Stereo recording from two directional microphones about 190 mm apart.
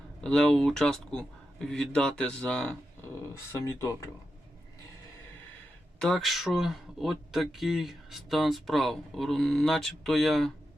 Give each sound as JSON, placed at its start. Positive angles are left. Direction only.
{"t": 0.2, "sound": "speech", "side_deg": 5}
{"t": 6.0, "sound": "speech", "side_deg": 0}